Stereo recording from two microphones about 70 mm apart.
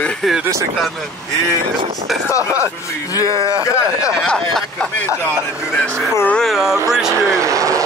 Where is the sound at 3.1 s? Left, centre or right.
Left.